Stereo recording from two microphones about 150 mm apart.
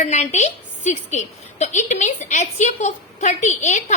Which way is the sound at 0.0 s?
50° left (ahead or behind).